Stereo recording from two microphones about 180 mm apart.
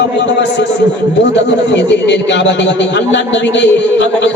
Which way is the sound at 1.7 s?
80° left.